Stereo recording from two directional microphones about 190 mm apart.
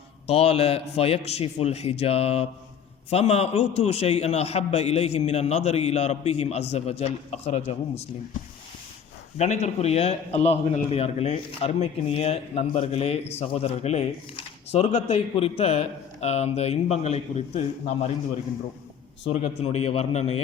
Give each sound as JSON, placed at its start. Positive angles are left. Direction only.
{"t": 0.3, "sound": "a man's voice", "side_deg": 30}
{"t": 9.4, "sound": "a man's voice", "side_deg": 35}
{"t": 19.3, "sound": "a man's voice", "side_deg": 30}